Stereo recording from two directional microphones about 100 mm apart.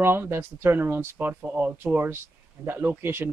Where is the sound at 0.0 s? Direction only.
25° right (ahead or behind).